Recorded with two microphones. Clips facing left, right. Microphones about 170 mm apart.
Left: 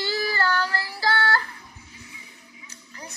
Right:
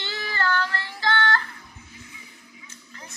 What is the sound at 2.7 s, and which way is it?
Music, 35° left (ahead or behind).